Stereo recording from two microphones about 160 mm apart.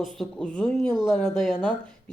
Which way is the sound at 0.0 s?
Centre (ahead or behind).